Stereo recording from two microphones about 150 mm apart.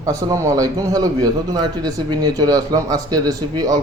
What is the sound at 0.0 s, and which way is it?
Speech, 25° right (ahead or behind).